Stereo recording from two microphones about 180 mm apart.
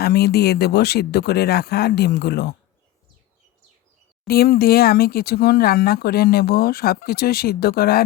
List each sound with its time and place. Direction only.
0.0 s speech: 60° left (ahead or behind)
4.3 s speech: 60° left (ahead or behind)